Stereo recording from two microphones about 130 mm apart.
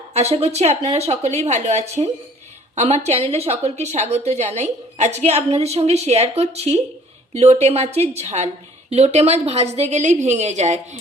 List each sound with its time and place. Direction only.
0.1 s a woman's voice: 55° right (ahead or behind)